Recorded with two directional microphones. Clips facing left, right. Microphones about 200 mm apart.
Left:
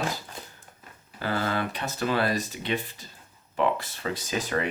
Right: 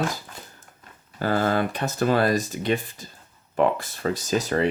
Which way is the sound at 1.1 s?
45° right (ahead or behind).